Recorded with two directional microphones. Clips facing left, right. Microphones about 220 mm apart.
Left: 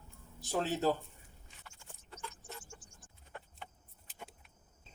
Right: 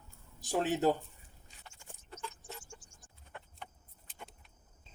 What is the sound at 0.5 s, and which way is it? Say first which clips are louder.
Speech: right 3 dB; 15° right (ahead or behind).